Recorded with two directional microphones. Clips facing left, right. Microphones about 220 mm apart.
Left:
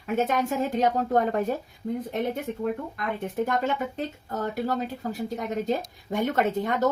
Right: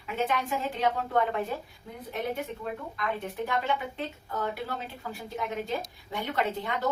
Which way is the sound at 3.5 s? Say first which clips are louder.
Left 4 dB; 45° left (ahead or behind).